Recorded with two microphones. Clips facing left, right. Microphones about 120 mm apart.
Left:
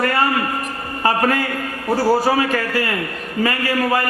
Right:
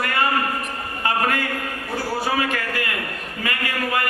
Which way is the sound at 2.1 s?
40° left (ahead or behind).